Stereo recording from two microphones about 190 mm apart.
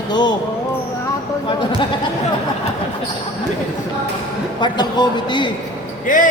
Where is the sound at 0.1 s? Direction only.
20° left (ahead or behind).